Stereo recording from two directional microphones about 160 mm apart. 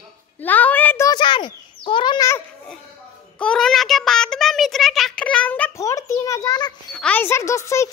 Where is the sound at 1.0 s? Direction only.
30° left (ahead or behind).